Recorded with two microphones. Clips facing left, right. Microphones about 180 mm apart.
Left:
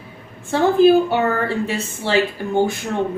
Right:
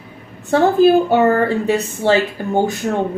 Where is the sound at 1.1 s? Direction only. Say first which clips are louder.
Right 6 dB; 45° right (ahead or behind).